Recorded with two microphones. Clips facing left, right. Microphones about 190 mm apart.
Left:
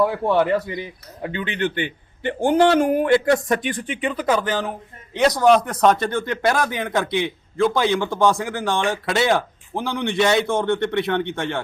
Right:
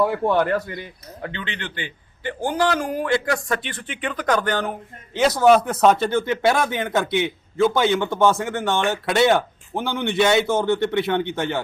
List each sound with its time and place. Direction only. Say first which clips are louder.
0.0 s speech: left 1 dB; centre (ahead or behind)
2.2 s speech: left 5 dB; 25° left (ahead or behind)
4.0 s speech: left 1 dB; 5° left (ahead or behind)